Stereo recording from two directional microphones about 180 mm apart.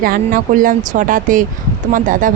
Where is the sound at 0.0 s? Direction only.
50° right (ahead or behind).